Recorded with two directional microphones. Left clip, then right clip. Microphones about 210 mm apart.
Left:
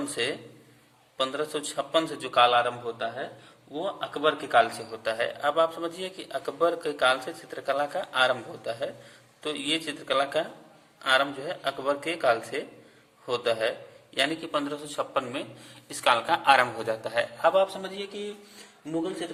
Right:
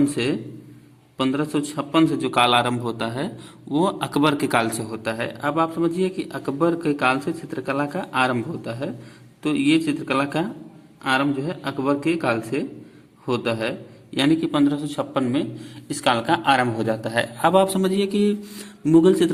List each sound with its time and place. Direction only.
0.1 s a man's voice: 20° right (ahead or behind)
2.4 s a man's voice: 35° right (ahead or behind)
4.9 s a man's voice: 25° right (ahead or behind); by 18.3 s 50° right (ahead or behind)